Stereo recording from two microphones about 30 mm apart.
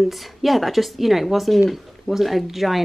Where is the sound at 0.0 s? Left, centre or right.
Centre.